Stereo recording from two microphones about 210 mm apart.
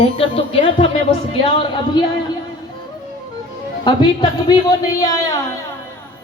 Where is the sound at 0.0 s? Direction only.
25° left (ahead or behind).